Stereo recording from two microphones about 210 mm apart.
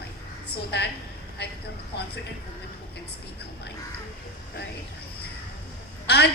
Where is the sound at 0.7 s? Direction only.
55° left (ahead or behind).